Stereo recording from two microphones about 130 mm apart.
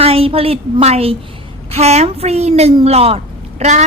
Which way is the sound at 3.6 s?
65° right (ahead or behind).